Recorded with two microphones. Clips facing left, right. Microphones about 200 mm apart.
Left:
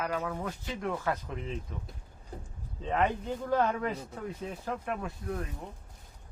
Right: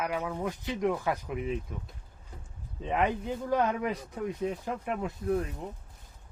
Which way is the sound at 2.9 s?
10° right (ahead or behind).